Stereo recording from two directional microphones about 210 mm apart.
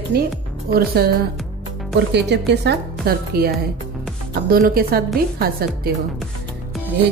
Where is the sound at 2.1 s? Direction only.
55° right (ahead or behind).